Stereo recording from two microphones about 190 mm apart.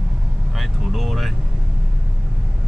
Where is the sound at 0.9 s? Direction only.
Centre (ahead or behind).